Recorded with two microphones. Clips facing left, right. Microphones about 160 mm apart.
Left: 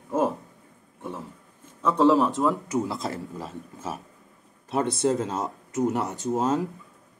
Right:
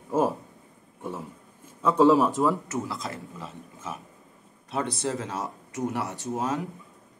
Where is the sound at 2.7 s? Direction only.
20° left (ahead or behind).